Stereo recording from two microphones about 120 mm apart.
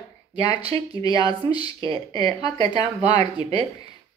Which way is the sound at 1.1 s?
45° right (ahead or behind).